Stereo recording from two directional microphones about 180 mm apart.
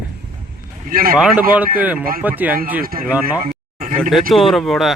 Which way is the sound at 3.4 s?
50° right (ahead or behind).